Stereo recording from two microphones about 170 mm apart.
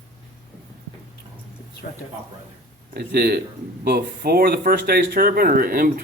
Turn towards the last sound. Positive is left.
turn(degrees=-60)  # may be behind; listen again after turning